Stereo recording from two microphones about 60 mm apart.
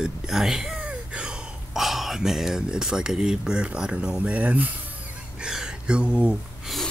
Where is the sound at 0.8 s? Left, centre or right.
Centre.